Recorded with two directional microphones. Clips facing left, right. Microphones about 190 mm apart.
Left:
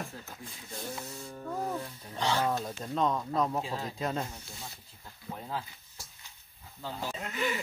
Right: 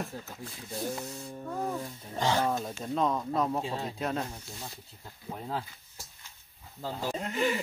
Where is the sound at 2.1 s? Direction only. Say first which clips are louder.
Right 2 dB; 45° right (ahead or behind).